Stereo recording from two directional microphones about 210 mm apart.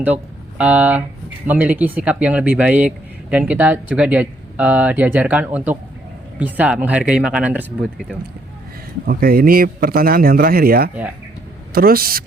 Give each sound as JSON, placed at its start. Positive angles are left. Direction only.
{"t": 0.6, "sound": "speech", "side_deg": -5}
{"t": 9.0, "sound": "speech", "side_deg": -45}